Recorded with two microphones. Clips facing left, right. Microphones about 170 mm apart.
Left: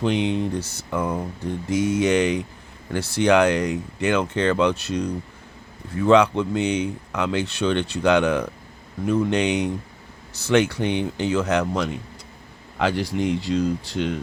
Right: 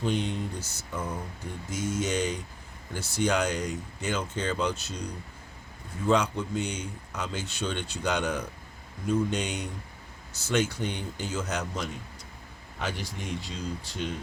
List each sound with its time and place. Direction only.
0.0 s speech: 75° left (ahead or behind)
0.9 s speech: 65° left (ahead or behind)
12.8 s speech: 90° left